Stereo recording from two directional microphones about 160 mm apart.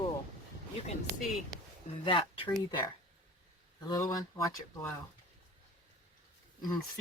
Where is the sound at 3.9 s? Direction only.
20° left (ahead or behind).